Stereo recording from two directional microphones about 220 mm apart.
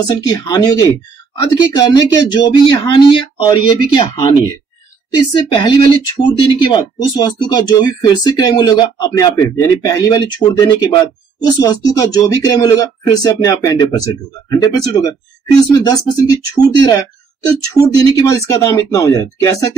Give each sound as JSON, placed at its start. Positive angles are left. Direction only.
{"t": 0.0, "sound": "speech", "side_deg": 15}